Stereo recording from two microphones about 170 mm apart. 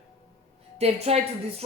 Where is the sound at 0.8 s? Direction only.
40° right (ahead or behind).